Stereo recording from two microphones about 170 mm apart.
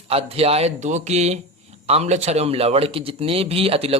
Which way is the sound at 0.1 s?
35° right (ahead or behind).